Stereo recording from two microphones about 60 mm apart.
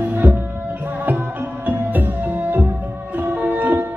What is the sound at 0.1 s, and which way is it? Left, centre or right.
Music, right.